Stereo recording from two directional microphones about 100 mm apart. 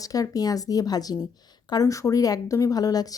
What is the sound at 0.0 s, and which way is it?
A woman's voice, 35° left (ahead or behind).